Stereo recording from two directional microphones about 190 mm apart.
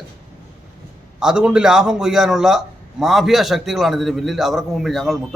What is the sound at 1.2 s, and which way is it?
A man's voice, 5° right (ahead or behind).